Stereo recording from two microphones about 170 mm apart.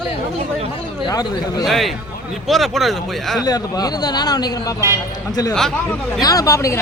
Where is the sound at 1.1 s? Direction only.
20° left (ahead or behind).